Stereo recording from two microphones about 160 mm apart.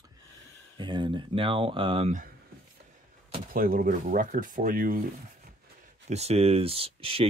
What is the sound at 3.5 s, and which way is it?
Speech, 60° right (ahead or behind).